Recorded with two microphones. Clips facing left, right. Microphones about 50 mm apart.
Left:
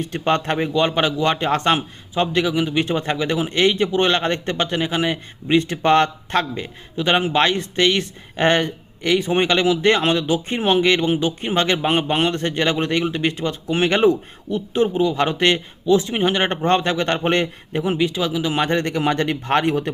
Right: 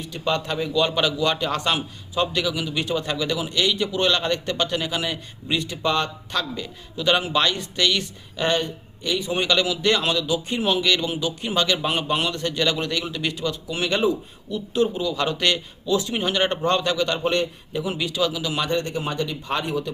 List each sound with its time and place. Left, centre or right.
0.0 s a man's voice: left
0.7 s a man's voice: left
9.2 s a man's voice: left
14.7 s a man's voice: left
17.1 s a man's voice: left
17.9 s speech: left
18.9 s speech: left